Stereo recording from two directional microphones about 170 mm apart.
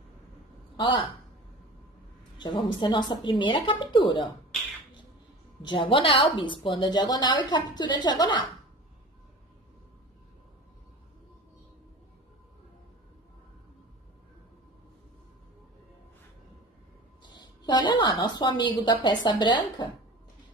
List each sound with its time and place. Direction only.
0.7 s speech: 25° left (ahead or behind)
2.3 s a sound: 25° left (ahead or behind)
2.8 s a woman's voice: 25° left (ahead or behind)
5.6 s a woman's voice: 30° left (ahead or behind)
17.2 s a sound: 25° left (ahead or behind)
18.4 s a woman's voice: 25° left (ahead or behind)